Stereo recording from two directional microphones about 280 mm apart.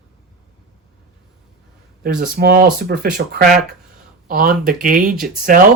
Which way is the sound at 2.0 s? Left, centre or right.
Right.